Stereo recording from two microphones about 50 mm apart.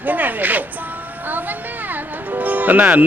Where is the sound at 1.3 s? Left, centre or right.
Right.